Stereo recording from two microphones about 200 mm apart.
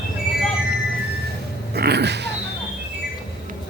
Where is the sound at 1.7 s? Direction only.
55° right (ahead or behind).